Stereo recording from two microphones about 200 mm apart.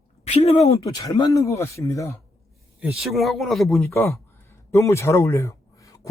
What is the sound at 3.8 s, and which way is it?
Speech, 10° left (ahead or behind).